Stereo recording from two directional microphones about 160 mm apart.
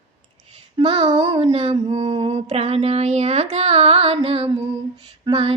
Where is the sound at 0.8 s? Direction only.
30° right (ahead or behind).